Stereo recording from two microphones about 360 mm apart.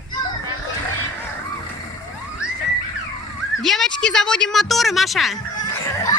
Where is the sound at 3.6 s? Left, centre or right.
Centre.